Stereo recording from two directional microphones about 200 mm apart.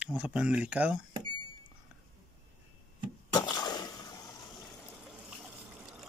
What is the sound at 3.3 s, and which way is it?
Breaking, 20° left (ahead or behind).